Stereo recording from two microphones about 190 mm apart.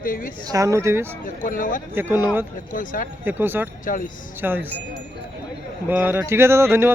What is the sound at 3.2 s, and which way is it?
A man's voice, 10° right (ahead or behind).